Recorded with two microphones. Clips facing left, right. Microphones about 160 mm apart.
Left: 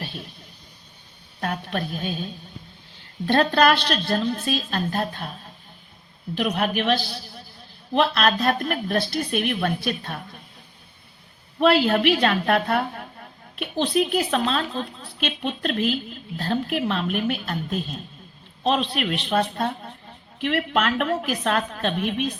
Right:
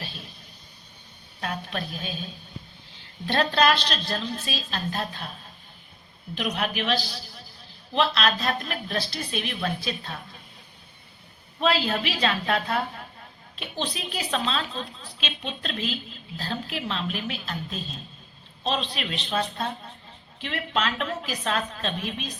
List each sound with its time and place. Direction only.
1.4 s a sound: 50° left (ahead or behind)
3.2 s speech: 50° left (ahead or behind)
6.3 s speech: 50° left (ahead or behind)
11.6 s a woman's voice: 60° left (ahead or behind)